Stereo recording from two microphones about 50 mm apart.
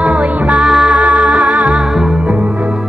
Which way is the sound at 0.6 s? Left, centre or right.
Centre.